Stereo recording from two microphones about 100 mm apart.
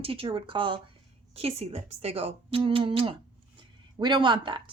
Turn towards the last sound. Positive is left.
turn(degrees=-50)  # may be behind; listen again after turning